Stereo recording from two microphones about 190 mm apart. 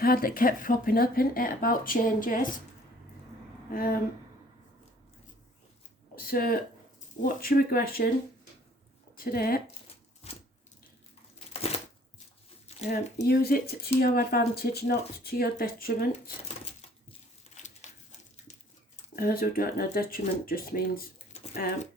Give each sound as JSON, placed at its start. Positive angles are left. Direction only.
{"t": 0.0, "sound": "speech", "side_deg": 50}
{"t": 3.7, "sound": "a sound", "side_deg": 50}
{"t": 6.1, "sound": "speech", "side_deg": 50}
{"t": 9.1, "sound": "speech", "side_deg": 50}
{"t": 12.9, "sound": "speech", "side_deg": 55}
{"t": 16.6, "sound": "a sound", "side_deg": 30}
{"t": 19.1, "sound": "speech", "side_deg": 50}